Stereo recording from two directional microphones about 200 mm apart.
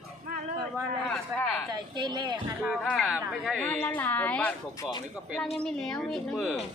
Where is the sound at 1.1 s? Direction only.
10° left (ahead or behind).